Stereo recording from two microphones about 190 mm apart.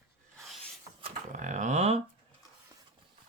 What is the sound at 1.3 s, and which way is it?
Speech, 40° right (ahead or behind).